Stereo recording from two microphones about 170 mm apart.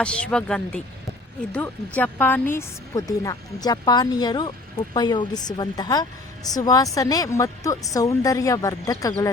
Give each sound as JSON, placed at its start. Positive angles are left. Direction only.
{"t": 0.0, "sound": "a woman's voice", "side_deg": 5}